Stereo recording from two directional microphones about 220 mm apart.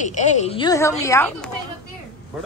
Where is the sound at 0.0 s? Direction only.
35° left (ahead or behind); by 1.5 s 10° left (ahead or behind).